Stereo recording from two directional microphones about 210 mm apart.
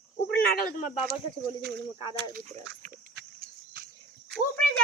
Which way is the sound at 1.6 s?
55° right (ahead or behind).